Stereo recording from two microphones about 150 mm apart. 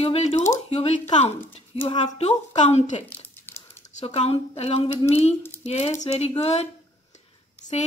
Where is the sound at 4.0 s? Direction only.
45° left (ahead or behind).